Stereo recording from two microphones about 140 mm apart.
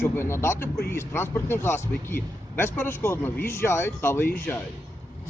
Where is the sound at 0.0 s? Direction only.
15° left (ahead or behind).